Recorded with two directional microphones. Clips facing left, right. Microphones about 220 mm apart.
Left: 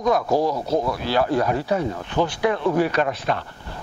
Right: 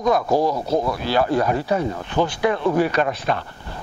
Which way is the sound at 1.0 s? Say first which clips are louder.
Right 1 dB; 20° right (ahead or behind).